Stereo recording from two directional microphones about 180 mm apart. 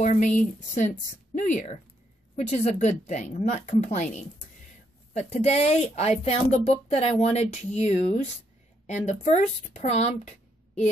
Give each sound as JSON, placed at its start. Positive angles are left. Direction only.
{"t": 0.0, "sound": "speech", "side_deg": 40}